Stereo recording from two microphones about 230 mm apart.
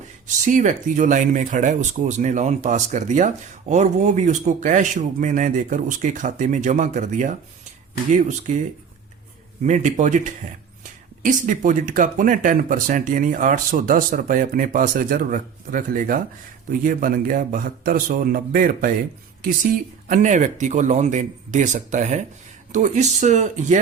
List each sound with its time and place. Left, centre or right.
0.4 s speech: right
9.6 s speech: right
20.1 s speech: right